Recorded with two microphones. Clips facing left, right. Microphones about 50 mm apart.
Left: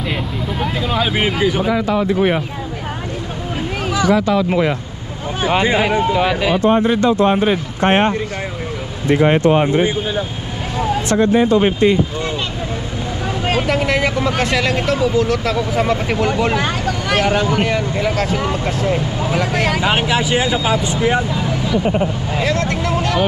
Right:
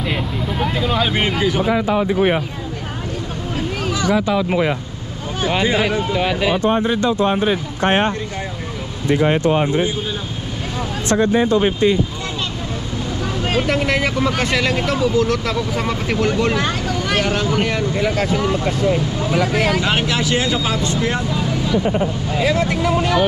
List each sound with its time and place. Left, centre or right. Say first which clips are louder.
0.1 s speech: even; centre
1.7 s speech: left 1 dB; centre
3.5 s vehicle: left 2 dB; centre
4.5 s speech: left 1 dB; centre
5.4 s speech: left 2 dB; centre
6.7 s speech: left 3 dB; left
9.1 s speech: left 3 dB; left
11.5 s speech: left 2 dB; left
13.5 s speech: left 1 dB; centre
19.8 s speech: left 2 dB; centre
22.4 s speech: right 1 dB; centre